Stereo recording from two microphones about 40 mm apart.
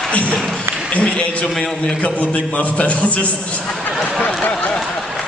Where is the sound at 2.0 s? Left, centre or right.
Left.